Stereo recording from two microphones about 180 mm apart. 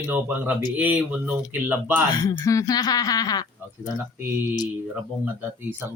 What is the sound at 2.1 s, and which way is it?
Speech, 20° left (ahead or behind).